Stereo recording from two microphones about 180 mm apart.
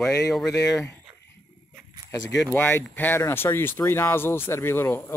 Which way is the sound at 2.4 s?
10° left (ahead or behind).